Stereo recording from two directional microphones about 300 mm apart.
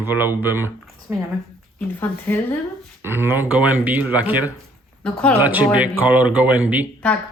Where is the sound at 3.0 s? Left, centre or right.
Centre.